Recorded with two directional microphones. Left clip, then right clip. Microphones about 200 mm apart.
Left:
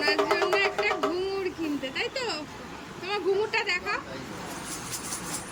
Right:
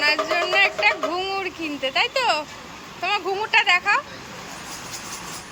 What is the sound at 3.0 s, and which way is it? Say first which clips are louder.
Speech: right 4 dB; 5° left (ahead or behind).